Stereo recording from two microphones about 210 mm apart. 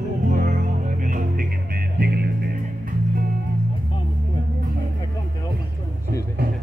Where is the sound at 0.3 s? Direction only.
40° right (ahead or behind).